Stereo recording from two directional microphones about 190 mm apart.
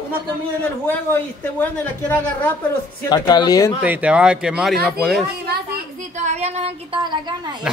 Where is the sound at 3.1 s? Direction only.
20° left (ahead or behind).